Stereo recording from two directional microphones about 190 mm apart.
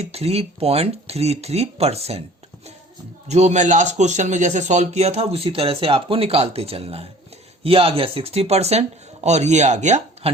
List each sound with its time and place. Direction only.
0.0 s a man's voice: 35° right (ahead or behind)
3.2 s a man's voice: 35° right (ahead or behind)